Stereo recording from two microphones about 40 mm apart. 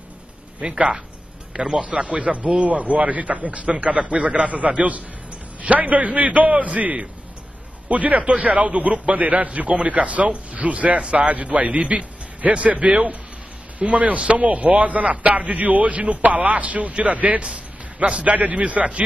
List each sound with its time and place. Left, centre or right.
0.6 s a man's voice: right